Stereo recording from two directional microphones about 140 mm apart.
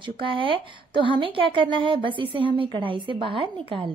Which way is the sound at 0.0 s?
40° right (ahead or behind).